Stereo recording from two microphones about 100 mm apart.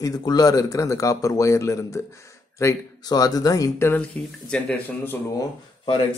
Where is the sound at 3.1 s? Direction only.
40° left (ahead or behind).